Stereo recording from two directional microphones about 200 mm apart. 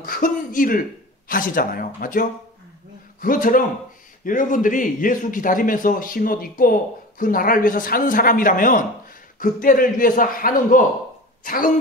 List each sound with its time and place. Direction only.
0.0 s speech: 45° left (ahead or behind)